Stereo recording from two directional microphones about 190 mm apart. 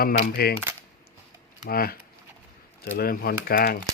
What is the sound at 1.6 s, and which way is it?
A man's voice, 50° left (ahead or behind).